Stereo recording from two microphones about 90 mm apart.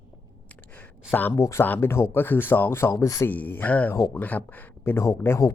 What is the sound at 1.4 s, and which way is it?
Speech, 35° left (ahead or behind).